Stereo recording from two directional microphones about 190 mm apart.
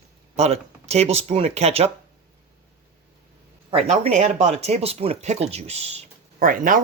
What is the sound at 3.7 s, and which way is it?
Speech, 30° right (ahead or behind).